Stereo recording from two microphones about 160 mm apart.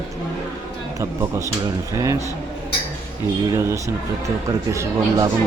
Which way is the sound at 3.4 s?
20° right (ahead or behind).